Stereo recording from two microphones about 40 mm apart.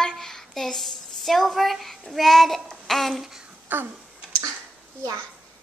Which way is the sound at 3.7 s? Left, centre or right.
Right.